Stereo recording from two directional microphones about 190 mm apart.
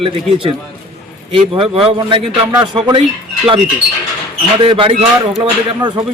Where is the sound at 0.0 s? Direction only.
30° right (ahead or behind).